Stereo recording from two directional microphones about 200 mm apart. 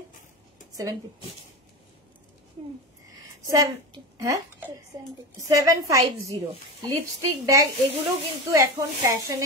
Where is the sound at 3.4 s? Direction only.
15° right (ahead or behind).